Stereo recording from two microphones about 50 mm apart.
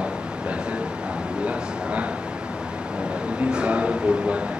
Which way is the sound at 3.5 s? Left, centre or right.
Right.